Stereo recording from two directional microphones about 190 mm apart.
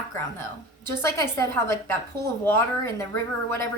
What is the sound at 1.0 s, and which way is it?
A woman's voice, 15° left (ahead or behind).